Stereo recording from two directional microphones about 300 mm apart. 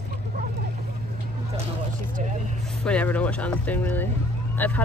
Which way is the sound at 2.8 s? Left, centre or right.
Centre.